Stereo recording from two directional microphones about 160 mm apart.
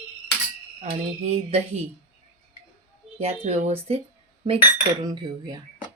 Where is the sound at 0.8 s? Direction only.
40° right (ahead or behind).